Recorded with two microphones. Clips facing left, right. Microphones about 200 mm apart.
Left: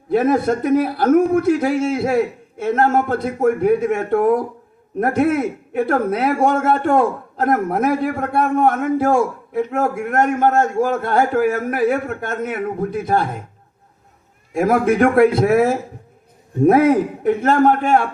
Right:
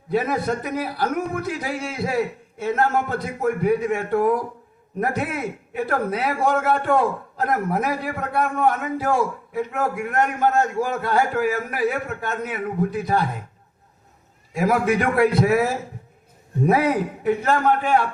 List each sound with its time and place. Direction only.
0.1 s a man's voice: 50° left (ahead or behind)
14.5 s a man's voice: 45° left (ahead or behind)